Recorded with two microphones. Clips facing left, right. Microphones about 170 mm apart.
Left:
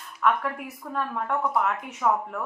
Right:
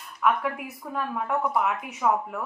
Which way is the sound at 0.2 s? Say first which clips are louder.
Even; 5° right (ahead or behind).